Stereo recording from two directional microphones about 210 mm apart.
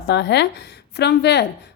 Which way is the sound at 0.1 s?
55° left (ahead or behind).